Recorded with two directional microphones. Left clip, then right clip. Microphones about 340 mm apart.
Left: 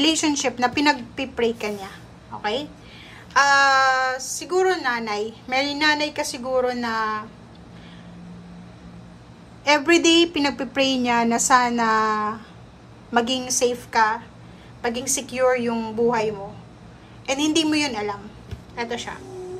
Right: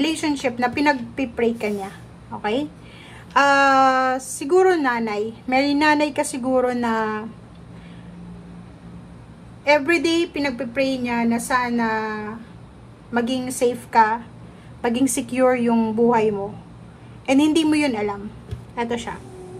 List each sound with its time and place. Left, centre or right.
0.0 s a woman's voice: centre
9.7 s a woman's voice: centre